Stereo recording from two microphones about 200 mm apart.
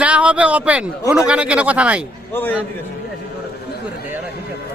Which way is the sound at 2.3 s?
10° left (ahead or behind).